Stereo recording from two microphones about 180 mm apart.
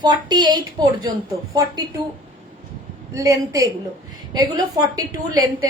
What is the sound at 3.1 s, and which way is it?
A woman's voice, 20° right (ahead or behind).